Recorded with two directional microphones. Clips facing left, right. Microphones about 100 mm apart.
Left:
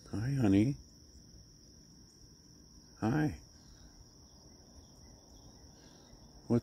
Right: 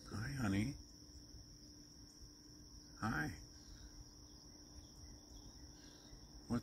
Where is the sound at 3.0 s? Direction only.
90° left.